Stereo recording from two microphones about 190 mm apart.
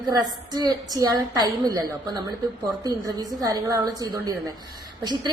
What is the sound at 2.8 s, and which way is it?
A woman's voice, 20° right (ahead or behind).